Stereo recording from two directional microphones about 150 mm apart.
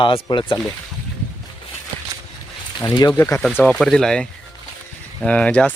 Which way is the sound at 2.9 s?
25° left (ahead or behind).